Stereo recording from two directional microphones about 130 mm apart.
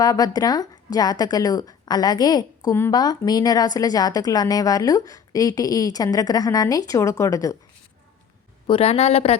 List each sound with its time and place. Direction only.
0.0 s a woman's voice: 30° left (ahead or behind)
8.6 s speech: 45° left (ahead or behind)